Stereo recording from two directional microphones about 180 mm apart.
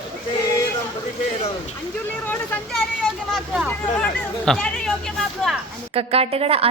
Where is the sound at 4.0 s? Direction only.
5° left (ahead or behind).